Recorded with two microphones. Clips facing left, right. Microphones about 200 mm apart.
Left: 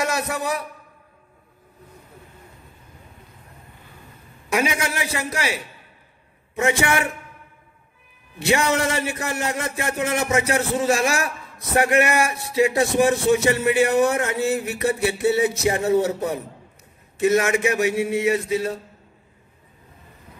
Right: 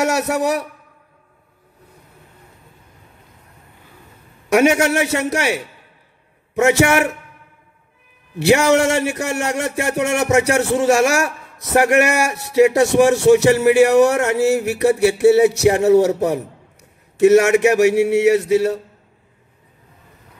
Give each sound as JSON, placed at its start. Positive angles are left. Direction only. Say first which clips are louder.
{"t": 0.0, "sound": "speech", "louder": "right 7 dB", "side_deg": -75}
{"t": 4.5, "sound": "speech", "louder": "right 9 dB", "side_deg": -75}
{"t": 8.5, "sound": "speech", "louder": "right 7 dB", "side_deg": -75}